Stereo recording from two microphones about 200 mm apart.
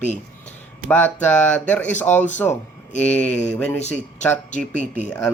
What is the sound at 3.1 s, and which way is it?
Speech, 10° left (ahead or behind).